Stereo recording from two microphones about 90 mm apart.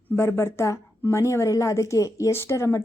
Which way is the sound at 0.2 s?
30° left (ahead or behind).